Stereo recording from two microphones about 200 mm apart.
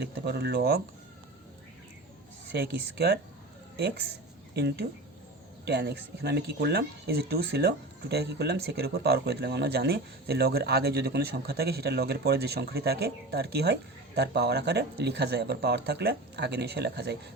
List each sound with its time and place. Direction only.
0.3 s speech: 55° right (ahead or behind)
2.5 s speech: 55° right (ahead or behind)
4.5 s speech: 55° right (ahead or behind)